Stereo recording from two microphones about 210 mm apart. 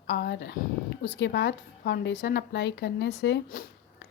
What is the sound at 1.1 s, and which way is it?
Speech, 55° left (ahead or behind).